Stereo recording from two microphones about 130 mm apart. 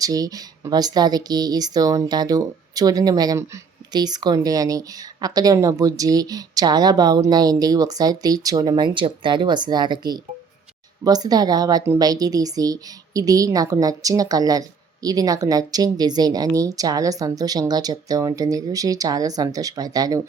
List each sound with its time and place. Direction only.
0.0 s a woman's voice: 30° right (ahead or behind)